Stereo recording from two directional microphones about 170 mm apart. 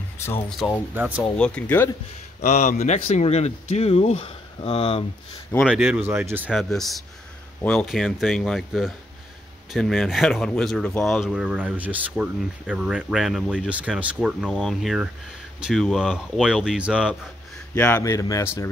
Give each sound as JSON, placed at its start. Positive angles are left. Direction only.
{"t": 0.6, "sound": "speech", "side_deg": 0}
{"t": 0.9, "sound": "speech", "side_deg": -10}
{"t": 1.3, "sound": "speech", "side_deg": 5}
{"t": 2.4, "sound": "speech", "side_deg": 45}
{"t": 5.7, "sound": "speech", "side_deg": -10}
{"t": 6.5, "sound": "speech", "side_deg": 0}
{"t": 17.7, "sound": "speech", "side_deg": 10}